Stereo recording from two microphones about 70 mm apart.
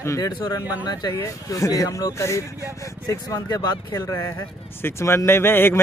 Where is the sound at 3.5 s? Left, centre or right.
Left.